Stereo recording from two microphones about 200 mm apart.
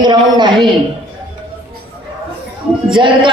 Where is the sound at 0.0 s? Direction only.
20° right (ahead or behind).